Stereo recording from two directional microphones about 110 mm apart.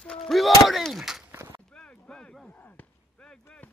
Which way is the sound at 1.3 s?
25° right (ahead or behind).